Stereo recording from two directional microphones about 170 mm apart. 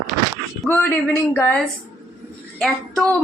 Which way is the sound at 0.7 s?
10° left (ahead or behind).